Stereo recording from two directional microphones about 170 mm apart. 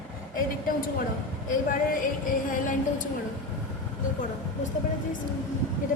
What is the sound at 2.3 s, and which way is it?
Speech, 50° left (ahead or behind).